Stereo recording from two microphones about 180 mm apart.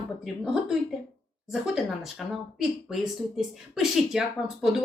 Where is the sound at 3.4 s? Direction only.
Centre (ahead or behind).